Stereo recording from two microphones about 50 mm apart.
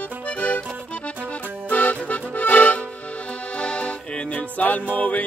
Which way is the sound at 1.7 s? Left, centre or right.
Left.